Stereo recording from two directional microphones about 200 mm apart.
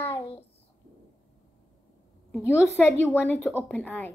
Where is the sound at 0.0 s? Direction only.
30° left (ahead or behind).